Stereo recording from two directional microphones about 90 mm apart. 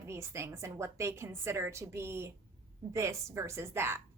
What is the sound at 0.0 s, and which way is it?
A woman's voice, 30° right (ahead or behind).